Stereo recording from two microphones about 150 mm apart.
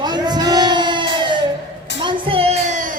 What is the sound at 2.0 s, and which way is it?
Child singing, 40° right (ahead or behind).